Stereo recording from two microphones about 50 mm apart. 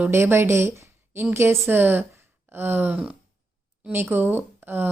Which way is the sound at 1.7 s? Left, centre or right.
Right.